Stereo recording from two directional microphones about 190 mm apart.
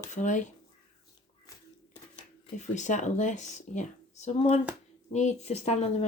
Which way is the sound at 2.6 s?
40° left (ahead or behind).